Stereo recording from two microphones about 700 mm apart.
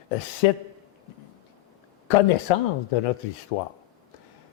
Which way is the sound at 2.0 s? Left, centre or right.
Left.